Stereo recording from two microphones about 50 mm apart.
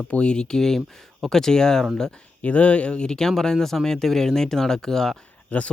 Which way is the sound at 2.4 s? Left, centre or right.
Left.